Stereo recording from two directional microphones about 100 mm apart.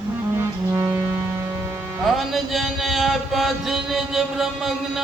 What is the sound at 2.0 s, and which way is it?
Mantra, centre (ahead or behind).